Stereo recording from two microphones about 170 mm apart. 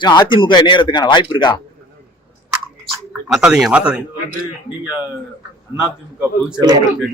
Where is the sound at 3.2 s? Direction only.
5° right (ahead or behind).